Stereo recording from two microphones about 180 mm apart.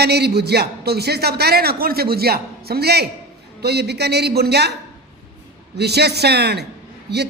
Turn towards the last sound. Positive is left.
turn(degrees=-65)  # may be behind; listen again after turning